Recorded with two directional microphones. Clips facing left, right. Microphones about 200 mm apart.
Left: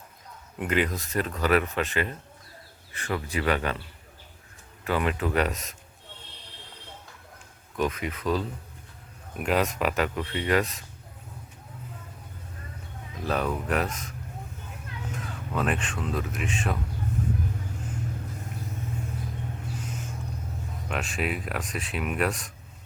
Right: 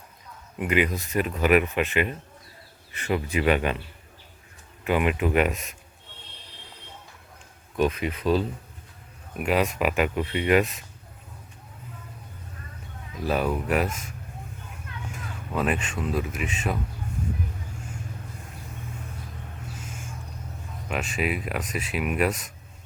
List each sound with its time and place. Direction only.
0.6 s speech: 10° right (ahead or behind)
4.8 s speech: 15° right (ahead or behind)
7.8 s speech: 25° right (ahead or behind)
9.4 s speech: 5° right (ahead or behind)
13.2 s speech: 10° right (ahead or behind)
15.5 s speech: 5° right (ahead or behind)
19.6 s vehicle: 5° right (ahead or behind)
20.8 s speech: 5° right (ahead or behind)